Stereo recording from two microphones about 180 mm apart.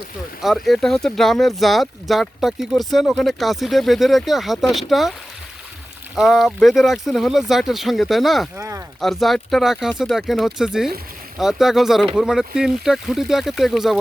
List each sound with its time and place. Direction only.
0.4 s speech: centre (ahead or behind)
6.1 s speech: centre (ahead or behind)
8.5 s speech: 15° right (ahead or behind)
9.0 s speech: centre (ahead or behind)